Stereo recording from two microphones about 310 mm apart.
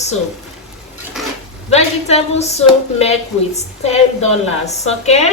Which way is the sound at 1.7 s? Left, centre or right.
Left.